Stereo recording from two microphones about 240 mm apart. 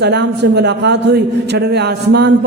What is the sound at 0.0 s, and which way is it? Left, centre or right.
A man's voice, right.